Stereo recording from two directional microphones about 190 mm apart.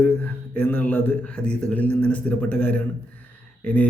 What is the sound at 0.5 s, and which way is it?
Speech, 10° left (ahead or behind).